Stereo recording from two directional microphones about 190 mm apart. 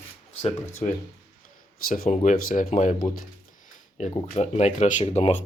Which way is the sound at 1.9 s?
45° left (ahead or behind).